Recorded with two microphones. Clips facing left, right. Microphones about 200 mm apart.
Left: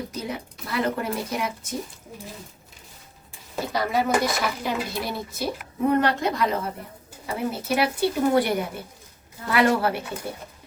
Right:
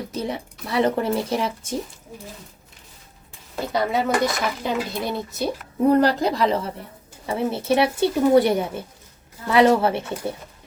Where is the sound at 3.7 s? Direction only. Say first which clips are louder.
Right 2 dB; 25° right (ahead or behind).